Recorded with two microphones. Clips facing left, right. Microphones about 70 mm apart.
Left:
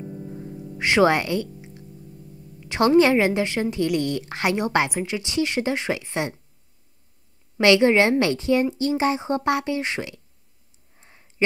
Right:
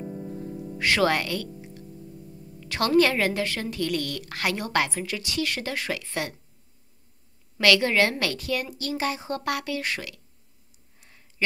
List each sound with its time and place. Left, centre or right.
0.0 s music: centre
0.7 s a woman's voice: left
7.5 s a woman's voice: left
11.0 s a sound: left